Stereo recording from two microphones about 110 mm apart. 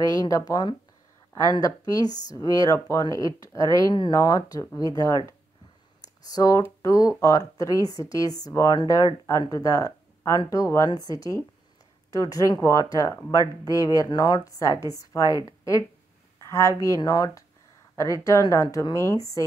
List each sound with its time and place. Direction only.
0.0 s a woman's voice: 35° left (ahead or behind)